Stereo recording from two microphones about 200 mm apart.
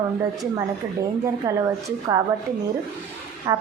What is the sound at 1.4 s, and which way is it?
Speech, 15° right (ahead or behind).